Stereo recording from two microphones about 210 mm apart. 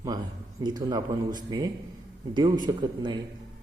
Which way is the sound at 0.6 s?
20° right (ahead or behind).